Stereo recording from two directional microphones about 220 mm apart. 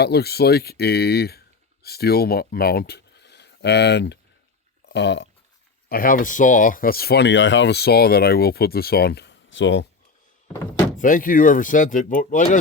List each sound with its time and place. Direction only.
0.0 s speech: 45° left (ahead or behind)
5.9 s speech: 40° left (ahead or behind); by 9.8 s 55° left (ahead or behind)
10.9 s speech: 35° left (ahead or behind)